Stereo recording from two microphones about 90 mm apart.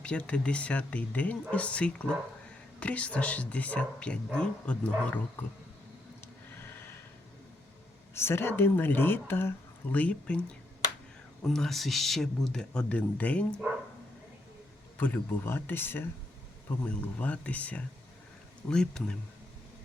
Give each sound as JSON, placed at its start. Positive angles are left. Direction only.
{"t": 0.0, "sound": "a woman's voice", "side_deg": 10}
{"t": 8.1, "sound": "speech", "side_deg": 30}
{"t": 11.4, "sound": "speech", "side_deg": 5}
{"t": 14.9, "sound": "a woman's voice", "side_deg": 20}